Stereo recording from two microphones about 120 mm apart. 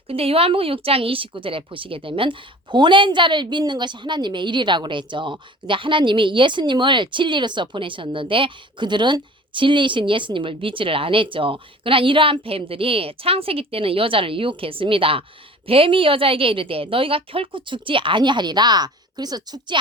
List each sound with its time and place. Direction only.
0.1 s a woman's voice: 55° right (ahead or behind); by 19.7 s 35° right (ahead or behind)